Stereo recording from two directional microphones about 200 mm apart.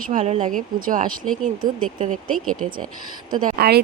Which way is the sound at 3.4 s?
45° right (ahead or behind).